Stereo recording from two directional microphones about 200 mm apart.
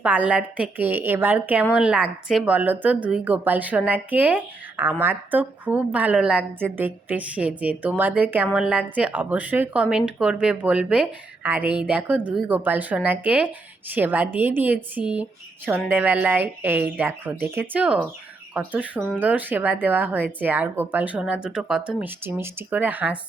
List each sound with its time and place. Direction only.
0.0 s speech: 5° right (ahead or behind)